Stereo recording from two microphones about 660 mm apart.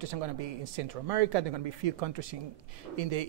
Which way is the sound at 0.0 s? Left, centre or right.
Right.